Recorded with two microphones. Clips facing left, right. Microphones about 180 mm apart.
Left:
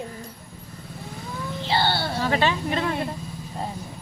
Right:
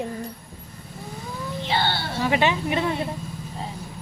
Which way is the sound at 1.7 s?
35° left (ahead or behind).